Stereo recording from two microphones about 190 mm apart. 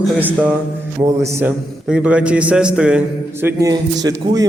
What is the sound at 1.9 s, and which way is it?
A man's voice, 5° right (ahead or behind).